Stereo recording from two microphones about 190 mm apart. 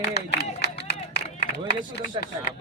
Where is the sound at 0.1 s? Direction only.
60° left (ahead or behind).